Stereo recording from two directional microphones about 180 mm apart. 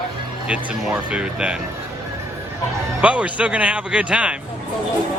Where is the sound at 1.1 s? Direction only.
5° right (ahead or behind).